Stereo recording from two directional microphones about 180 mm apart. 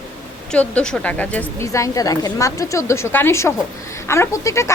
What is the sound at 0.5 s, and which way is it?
Speech, 5° left (ahead or behind).